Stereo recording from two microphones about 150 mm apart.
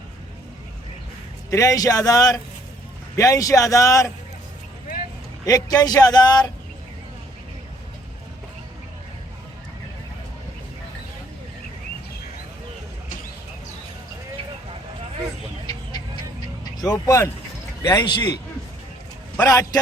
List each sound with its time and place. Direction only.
1.5 s speech: 20° left (ahead or behind)
5.5 s speech: 25° left (ahead or behind)
16.7 s speech: 25° left (ahead or behind)
19.5 s speech: 25° left (ahead or behind)